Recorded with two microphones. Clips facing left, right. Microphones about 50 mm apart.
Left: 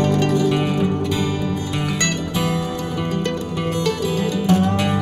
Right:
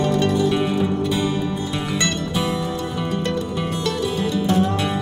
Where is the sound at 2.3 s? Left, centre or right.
Left.